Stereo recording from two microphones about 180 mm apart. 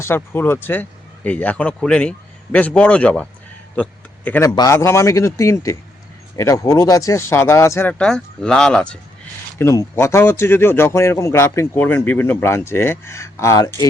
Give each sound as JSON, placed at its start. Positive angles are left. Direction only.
{"t": 0.0, "sound": "speech", "side_deg": 10}
{"t": 9.6, "sound": "speech", "side_deg": 15}